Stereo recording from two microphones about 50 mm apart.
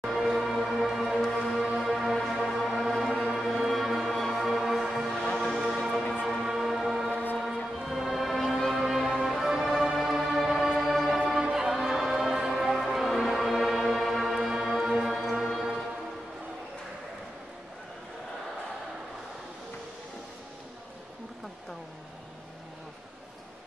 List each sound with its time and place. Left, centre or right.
0.0 s music: centre